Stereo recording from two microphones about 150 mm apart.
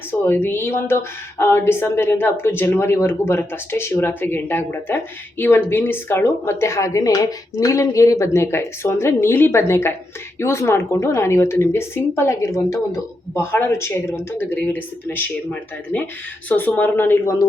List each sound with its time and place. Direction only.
0.1 s a woman's voice: 15° left (ahead or behind)
16.5 s a woman's voice: 10° left (ahead or behind)